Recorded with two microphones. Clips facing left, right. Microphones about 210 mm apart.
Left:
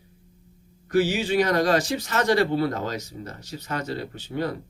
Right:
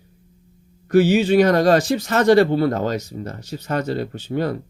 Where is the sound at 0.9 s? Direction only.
60° right (ahead or behind).